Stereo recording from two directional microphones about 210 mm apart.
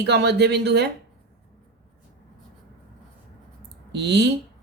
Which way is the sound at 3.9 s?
55° right (ahead or behind).